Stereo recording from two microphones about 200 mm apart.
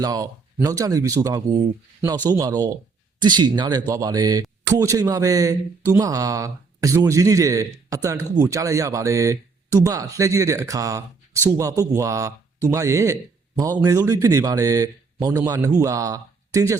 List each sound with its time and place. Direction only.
0.0 s speech: 15° right (ahead or behind)